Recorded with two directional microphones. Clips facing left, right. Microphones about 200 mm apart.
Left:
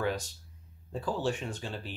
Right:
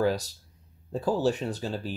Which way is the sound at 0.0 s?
35° right (ahead or behind).